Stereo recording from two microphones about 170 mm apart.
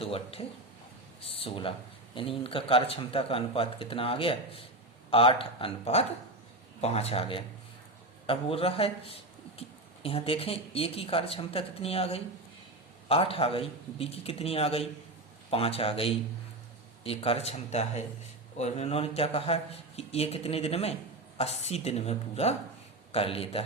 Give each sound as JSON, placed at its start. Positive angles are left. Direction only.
{"t": 0.0, "sound": "speech", "side_deg": 35}